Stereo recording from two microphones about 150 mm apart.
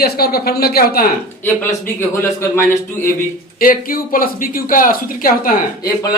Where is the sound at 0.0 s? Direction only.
90° left.